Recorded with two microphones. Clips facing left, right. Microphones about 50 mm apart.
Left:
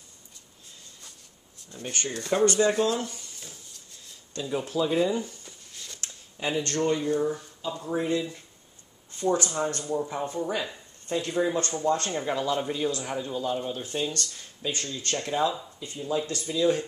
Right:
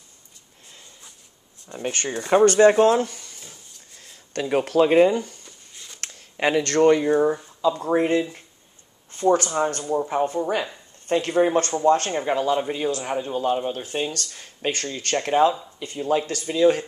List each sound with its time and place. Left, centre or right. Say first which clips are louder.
1.7 s speech: right 6 dB; right
2.4 s speech: right 8 dB; right
4.3 s speech: right 8 dB; right
5.1 s speech: right 4 dB; right
5.7 s a sound: even; centre
5.9 s a sound: right 12 dB; right
7.1 s speech: right 7 dB; right
9.1 s speech: right 6 dB; right
12.1 s speech: right 5 dB; right
14.6 s speech: right 5 dB; right
15.8 s speech: right 7 dB; right